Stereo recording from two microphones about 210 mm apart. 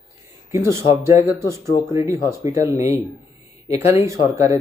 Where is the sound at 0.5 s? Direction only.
15° right (ahead or behind).